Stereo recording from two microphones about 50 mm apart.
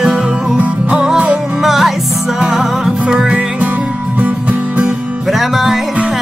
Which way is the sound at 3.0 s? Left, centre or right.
Right.